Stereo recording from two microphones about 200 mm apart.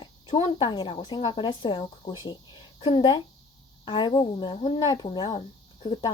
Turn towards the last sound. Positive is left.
turn(degrees=20)  # may be behind; listen again after turning